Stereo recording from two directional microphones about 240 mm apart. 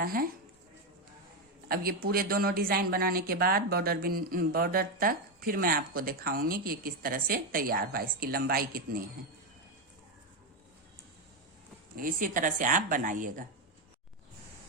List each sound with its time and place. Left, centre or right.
0.0 s speech: right
1.6 s speech: right
11.9 s speech: right